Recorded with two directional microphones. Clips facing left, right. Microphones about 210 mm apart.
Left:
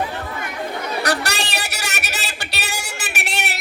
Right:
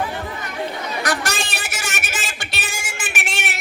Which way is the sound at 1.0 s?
35° left (ahead or behind).